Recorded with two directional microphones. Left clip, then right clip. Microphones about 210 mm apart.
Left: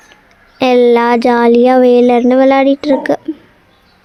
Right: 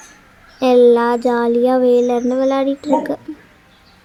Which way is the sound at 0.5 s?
35° left (ahead or behind).